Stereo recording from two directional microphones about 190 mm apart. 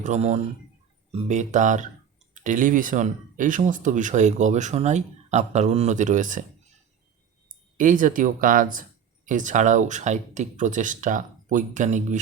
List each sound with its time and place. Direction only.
0.0 s speech: 35° right (ahead or behind)
7.8 s speech: 45° right (ahead or behind)